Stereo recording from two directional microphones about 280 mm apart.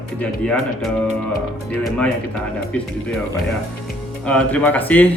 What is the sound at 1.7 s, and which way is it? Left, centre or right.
Speech, centre.